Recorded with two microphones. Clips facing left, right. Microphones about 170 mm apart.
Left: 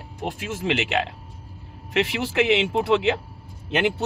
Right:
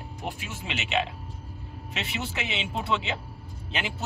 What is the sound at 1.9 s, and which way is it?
Speech, 90° left.